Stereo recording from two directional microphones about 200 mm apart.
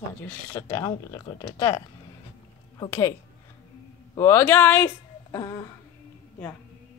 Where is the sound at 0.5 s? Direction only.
15° left (ahead or behind).